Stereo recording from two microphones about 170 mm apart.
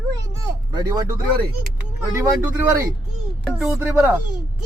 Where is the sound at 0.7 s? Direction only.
25° right (ahead or behind).